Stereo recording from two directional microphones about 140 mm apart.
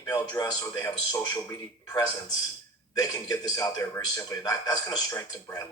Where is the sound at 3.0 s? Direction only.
30° left (ahead or behind).